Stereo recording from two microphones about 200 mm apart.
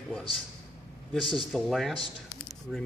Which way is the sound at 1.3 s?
Centre (ahead or behind).